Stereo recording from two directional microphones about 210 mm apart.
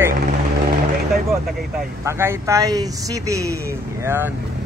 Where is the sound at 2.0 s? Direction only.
10° right (ahead or behind).